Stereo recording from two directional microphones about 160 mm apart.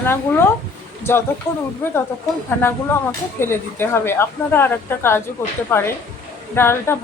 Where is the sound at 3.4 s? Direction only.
15° left (ahead or behind).